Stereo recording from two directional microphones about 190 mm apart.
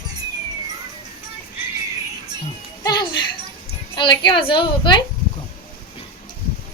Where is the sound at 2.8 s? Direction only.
20° left (ahead or behind).